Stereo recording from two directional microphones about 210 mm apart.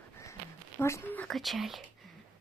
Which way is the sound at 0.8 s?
10° left (ahead or behind).